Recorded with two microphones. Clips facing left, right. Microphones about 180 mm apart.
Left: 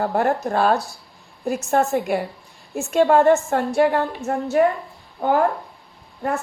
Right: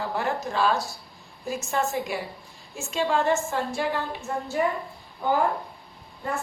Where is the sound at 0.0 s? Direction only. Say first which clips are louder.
Left 8 dB; 55° left (ahead or behind).